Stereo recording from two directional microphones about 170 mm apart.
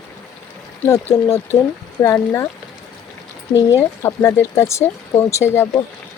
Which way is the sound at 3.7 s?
15° left (ahead or behind).